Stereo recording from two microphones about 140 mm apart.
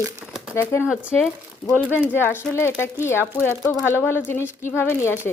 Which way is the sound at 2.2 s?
15° left (ahead or behind).